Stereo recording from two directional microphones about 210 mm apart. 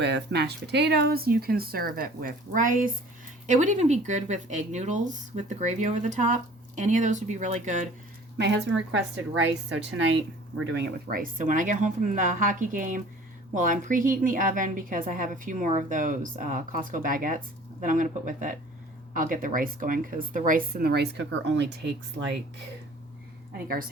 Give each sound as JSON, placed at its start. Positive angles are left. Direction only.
{"t": 0.0, "sound": "a woman's voice", "side_deg": -55}
{"t": 8.4, "sound": "a woman's voice", "side_deg": -55}